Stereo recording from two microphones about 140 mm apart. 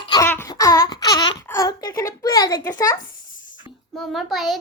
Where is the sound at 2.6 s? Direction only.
25° left (ahead or behind).